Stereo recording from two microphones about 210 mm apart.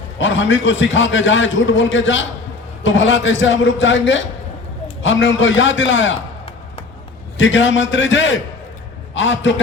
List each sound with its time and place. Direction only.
0.2 s a man's voice: 65° left (ahead or behind)
7.3 s a man's voice: 60° left (ahead or behind)